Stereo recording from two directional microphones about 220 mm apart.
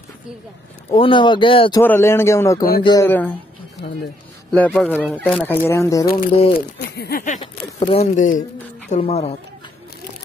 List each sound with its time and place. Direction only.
0.9 s speech: 25° left (ahead or behind)
1.8 s speech: 10° left (ahead or behind)
4.5 s a man's voice: 5° left (ahead or behind)
6.3 s speech: 25° left (ahead or behind)
7.0 s a sound: 40° left (ahead or behind)
8.9 s speech: 30° left (ahead or behind)